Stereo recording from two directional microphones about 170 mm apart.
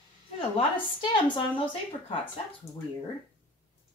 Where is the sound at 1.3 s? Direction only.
30° left (ahead or behind).